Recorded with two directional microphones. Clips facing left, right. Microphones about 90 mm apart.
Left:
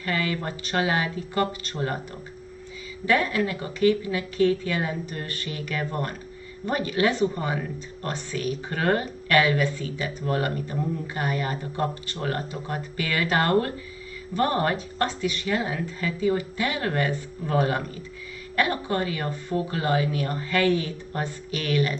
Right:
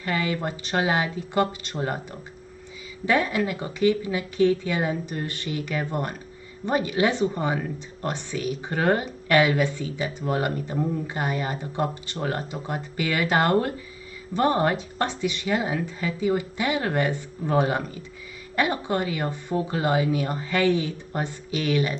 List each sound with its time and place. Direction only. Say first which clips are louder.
0.0 s speech: right 1 dB; 20° right (ahead or behind)
3.1 s a woman's voice: even; 20° right (ahead or behind)